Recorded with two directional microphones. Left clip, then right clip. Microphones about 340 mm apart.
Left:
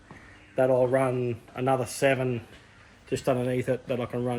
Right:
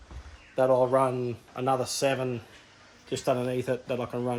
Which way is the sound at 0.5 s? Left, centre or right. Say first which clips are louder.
Even; centre.